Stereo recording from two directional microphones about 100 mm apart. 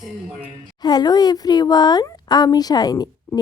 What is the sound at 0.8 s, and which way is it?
Speech, 45° left (ahead or behind).